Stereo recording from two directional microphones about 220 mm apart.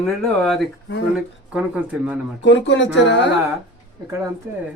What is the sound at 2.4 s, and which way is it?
Speech, 55° left (ahead or behind).